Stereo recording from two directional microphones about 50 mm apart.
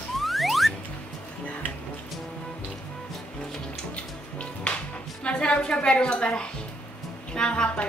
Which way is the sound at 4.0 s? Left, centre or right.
Left.